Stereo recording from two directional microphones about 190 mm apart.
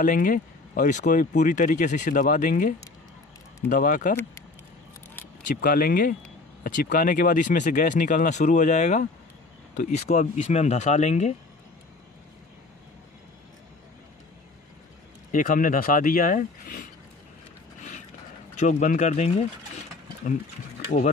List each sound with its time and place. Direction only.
0.0 s speech: 45° left (ahead or behind)
5.4 s speech: 45° left (ahead or behind)
15.3 s speech: 45° left (ahead or behind)
18.6 s speech: 40° left (ahead or behind)